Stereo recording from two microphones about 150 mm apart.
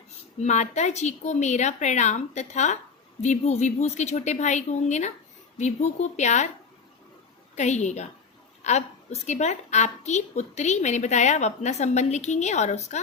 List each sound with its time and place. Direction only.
0.3 s a woman's voice: 50° left (ahead or behind)
7.5 s a woman's voice: 50° left (ahead or behind)